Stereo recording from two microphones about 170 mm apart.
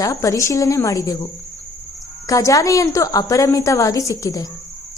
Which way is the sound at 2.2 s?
20° left (ahead or behind).